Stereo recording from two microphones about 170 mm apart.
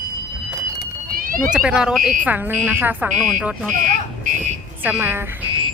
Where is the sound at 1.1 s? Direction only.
55° right (ahead or behind).